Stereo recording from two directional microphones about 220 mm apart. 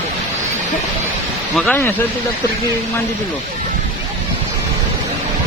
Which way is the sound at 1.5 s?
5° left (ahead or behind).